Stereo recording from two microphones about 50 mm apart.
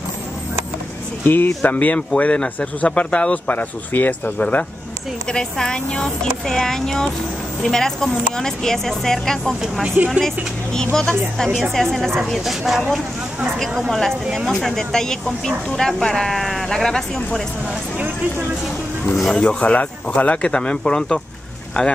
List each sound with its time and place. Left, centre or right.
1.2 s speech: left
5.3 s speech: centre
19.1 s speech: centre
19.4 s speech: left
20.5 s speech: centre